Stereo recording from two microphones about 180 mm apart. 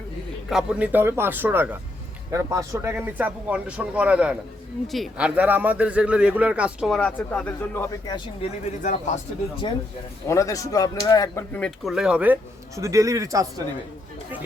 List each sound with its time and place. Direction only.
0.5 s a man's voice: 5° right (ahead or behind)
8.0 s speech: 30° left (ahead or behind)
10.2 s speech: 15° left (ahead or behind)
11.5 s speech: 5° left (ahead or behind); by 13.5 s 20° right (ahead or behind)